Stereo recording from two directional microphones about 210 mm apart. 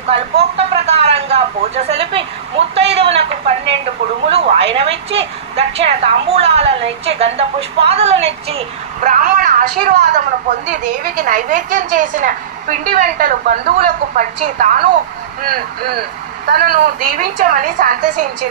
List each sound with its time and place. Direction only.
0.1 s a woman's voice: 30° right (ahead or behind)